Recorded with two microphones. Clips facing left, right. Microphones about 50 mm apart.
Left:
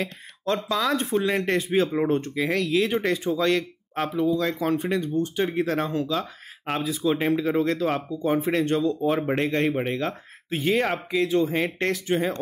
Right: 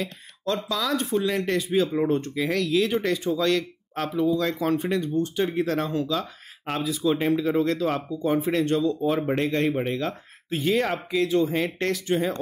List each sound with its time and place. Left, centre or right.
0.7 s speech: left
2.3 s speech: centre